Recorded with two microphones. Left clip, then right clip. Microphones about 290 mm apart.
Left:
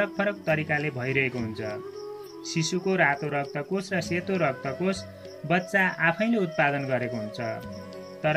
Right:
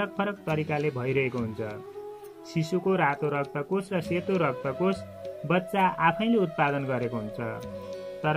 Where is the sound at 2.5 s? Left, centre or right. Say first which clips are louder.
Left 1 dB; centre.